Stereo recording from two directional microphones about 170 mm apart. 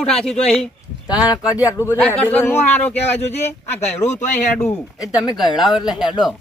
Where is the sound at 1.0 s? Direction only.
25° left (ahead or behind).